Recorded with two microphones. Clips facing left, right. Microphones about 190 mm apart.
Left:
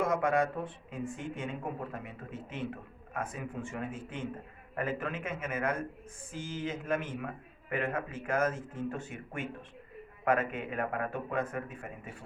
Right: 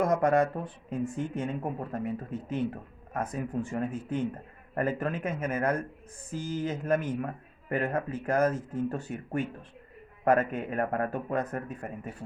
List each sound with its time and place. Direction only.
0.0 s speech: 40° right (ahead or behind)